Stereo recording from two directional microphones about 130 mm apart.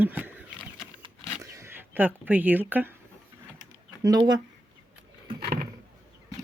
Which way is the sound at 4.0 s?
30° right (ahead or behind).